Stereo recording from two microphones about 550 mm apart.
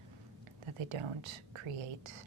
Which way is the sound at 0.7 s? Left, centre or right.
Right.